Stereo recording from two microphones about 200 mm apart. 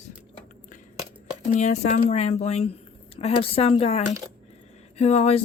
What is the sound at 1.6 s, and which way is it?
Speech, 35° left (ahead or behind).